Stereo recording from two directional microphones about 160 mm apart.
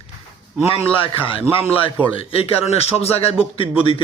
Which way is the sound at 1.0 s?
35° left (ahead or behind).